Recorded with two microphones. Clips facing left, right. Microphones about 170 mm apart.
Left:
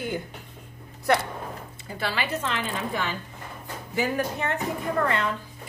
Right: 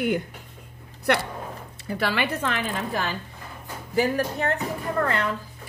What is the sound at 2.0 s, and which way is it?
Speech, 60° right (ahead or behind).